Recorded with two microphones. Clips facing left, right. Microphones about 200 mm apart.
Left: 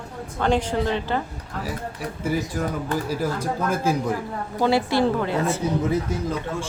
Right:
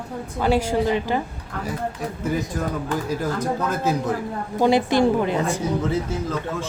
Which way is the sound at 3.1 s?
10° left (ahead or behind).